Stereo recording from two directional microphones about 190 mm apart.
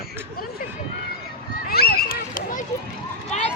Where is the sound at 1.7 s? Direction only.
55° left (ahead or behind).